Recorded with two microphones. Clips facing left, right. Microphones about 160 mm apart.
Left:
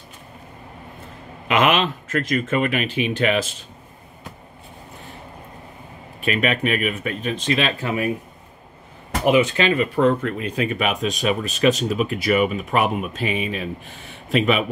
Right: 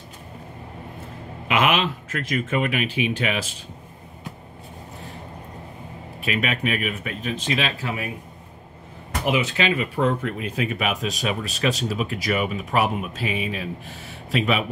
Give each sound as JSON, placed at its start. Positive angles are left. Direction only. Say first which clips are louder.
{"t": 1.5, "sound": "speech", "louder": "left 3 dB", "side_deg": -10}
{"t": 6.2, "sound": "speech", "louder": "left 4 dB", "side_deg": -5}
{"t": 7.8, "sound": "speech", "louder": "left 6 dB", "side_deg": 55}
{"t": 9.3, "sound": "speech", "louder": "left 5 dB", "side_deg": -5}